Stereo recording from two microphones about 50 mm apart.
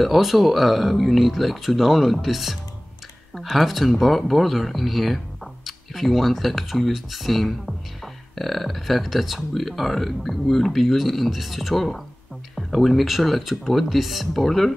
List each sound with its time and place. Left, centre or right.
0.0 s speech: centre